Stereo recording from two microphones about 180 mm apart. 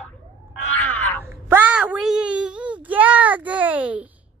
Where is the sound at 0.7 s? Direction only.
10° left (ahead or behind).